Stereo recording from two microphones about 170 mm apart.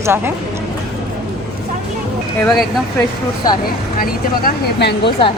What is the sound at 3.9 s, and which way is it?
Speech, 60° left (ahead or behind).